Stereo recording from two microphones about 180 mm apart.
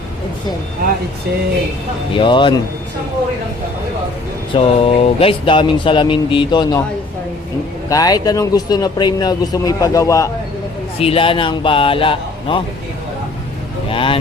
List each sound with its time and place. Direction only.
2.1 s a man's voice: 25° left (ahead or behind)
4.5 s a man's voice: 30° left (ahead or behind)
7.9 s a man's voice: 20° left (ahead or behind)
11.0 s a man's voice: 30° left (ahead or behind)
13.9 s a man's voice: 30° left (ahead or behind)